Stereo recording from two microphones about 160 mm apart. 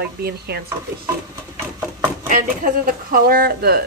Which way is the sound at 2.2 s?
60° right (ahead or behind).